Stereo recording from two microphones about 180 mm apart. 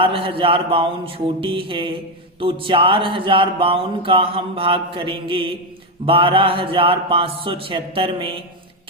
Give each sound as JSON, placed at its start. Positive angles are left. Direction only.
{"t": 0.0, "sound": "speech", "side_deg": -30}